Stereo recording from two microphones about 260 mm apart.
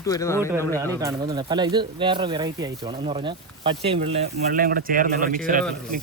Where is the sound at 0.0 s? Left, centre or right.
Centre.